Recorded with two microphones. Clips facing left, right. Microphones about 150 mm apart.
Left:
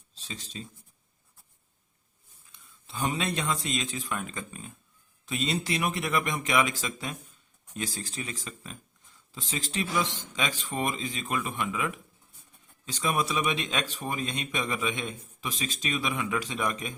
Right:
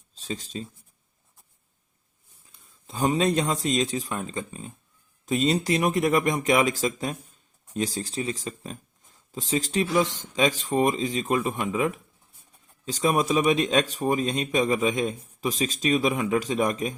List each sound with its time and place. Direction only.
0.1 s a sound: 45° right (ahead or behind)
2.5 s speech: 40° right (ahead or behind)
5.2 s speech: 40° right (ahead or behind)